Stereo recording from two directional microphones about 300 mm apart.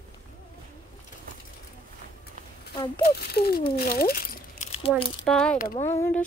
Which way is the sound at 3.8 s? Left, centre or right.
Left.